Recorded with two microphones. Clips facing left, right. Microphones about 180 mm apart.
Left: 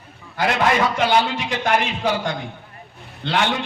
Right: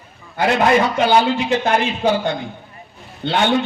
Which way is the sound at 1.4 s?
25° right (ahead or behind).